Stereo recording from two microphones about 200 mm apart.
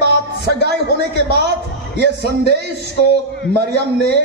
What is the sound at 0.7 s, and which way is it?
Speech, 55° right (ahead or behind).